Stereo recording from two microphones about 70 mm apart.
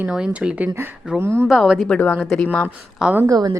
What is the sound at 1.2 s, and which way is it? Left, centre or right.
Speech, right.